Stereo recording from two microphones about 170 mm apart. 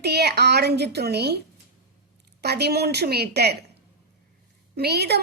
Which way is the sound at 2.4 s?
70° right (ahead or behind).